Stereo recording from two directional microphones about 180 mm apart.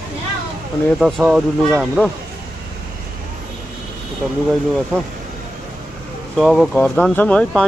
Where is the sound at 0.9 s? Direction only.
Centre (ahead or behind).